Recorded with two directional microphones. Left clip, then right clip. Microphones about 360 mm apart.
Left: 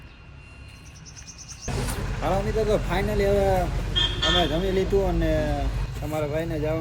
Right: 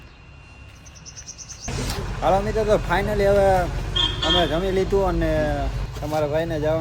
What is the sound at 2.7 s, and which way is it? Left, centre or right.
Speech, centre.